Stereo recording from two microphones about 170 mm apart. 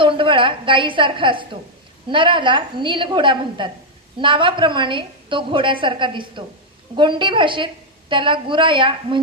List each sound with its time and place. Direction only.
0.0 s a woman's voice: 30° right (ahead or behind)